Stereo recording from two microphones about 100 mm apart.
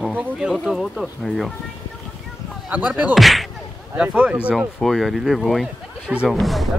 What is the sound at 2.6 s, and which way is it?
Speech, 15° right (ahead or behind).